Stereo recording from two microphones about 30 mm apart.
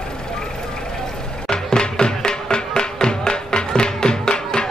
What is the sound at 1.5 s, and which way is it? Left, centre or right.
Music, left.